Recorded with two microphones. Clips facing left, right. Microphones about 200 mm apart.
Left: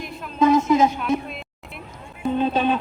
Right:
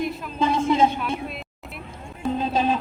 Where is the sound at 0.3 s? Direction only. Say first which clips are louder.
Left 4 dB; 30° right (ahead or behind).